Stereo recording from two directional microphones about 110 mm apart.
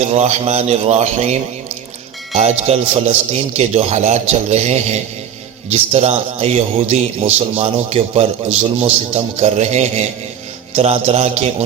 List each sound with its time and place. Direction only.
0.0 s speech: 80° right
2.3 s a man's voice: 75° right (ahead or behind)
5.7 s a man's voice: 70° right (ahead or behind); by 10.1 s 90° right
10.8 s a man's voice: 70° right (ahead or behind)